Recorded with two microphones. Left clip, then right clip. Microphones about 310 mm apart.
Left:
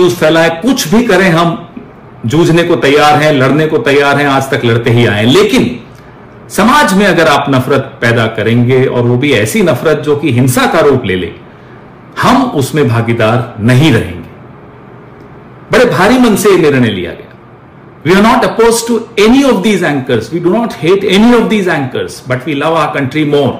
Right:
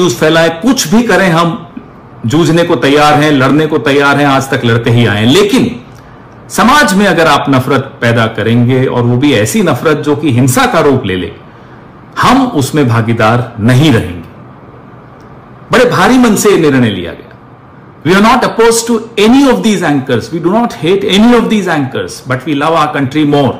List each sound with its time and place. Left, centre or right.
0.0 s a man's voice: centre
16.4 s a man's voice: centre